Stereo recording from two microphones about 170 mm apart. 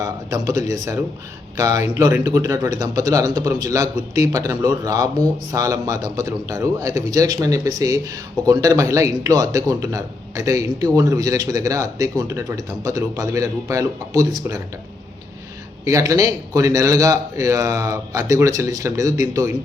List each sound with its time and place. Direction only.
0.0 s a man's voice: 20° right (ahead or behind)
15.8 s a man's voice: 20° right (ahead or behind)